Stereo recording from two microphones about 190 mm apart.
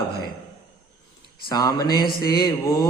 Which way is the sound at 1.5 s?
20° left (ahead or behind).